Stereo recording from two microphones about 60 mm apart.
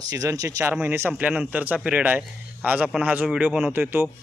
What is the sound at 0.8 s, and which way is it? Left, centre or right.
Speech, right.